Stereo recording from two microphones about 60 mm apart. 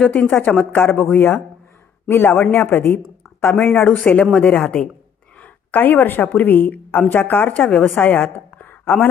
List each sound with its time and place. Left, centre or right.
0.0 s a woman's voice: left
3.9 s a woman's voice: left